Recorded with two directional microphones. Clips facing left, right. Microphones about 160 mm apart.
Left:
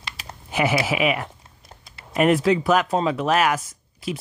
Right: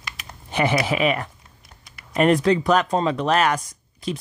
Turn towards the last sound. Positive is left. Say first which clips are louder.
# right 1 dB
turn(degrees=5)  # may be behind; listen again after turning